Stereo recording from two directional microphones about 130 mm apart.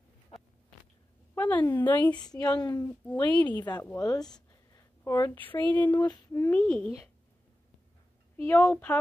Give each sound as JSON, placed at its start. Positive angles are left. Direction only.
{"t": 1.3, "sound": "a woman's voice", "side_deg": 15}
{"t": 2.0, "sound": "a woman's voice", "side_deg": 30}
{"t": 3.3, "sound": "speech", "side_deg": 15}
{"t": 4.0, "sound": "a sound", "side_deg": 30}
{"t": 5.4, "sound": "speech", "side_deg": 15}
{"t": 5.9, "sound": "female singing", "side_deg": 30}
{"t": 6.4, "sound": "speech", "side_deg": 10}
{"t": 8.4, "sound": "speech", "side_deg": 20}